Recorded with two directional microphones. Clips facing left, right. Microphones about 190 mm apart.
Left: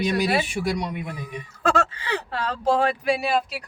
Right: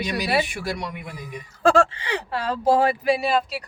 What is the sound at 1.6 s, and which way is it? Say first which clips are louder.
Speech: right 5 dB; 30° right (ahead or behind).